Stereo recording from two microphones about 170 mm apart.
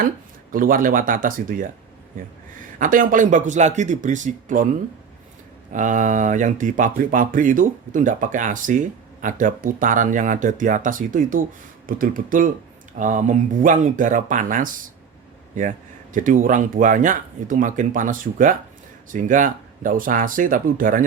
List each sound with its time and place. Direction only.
0.5 s speech: 55° right (ahead or behind)
2.7 s speech: 50° right (ahead or behind)
5.7 s speech: 50° right (ahead or behind)
16.1 s speech: 50° right (ahead or behind)